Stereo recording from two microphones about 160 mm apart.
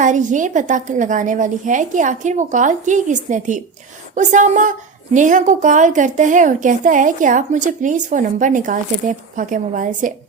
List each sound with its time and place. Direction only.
0.0 s a woman's voice: 50° right (ahead or behind)